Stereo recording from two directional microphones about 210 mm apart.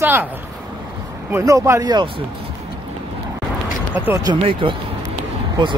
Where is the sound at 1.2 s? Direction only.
15° right (ahead or behind).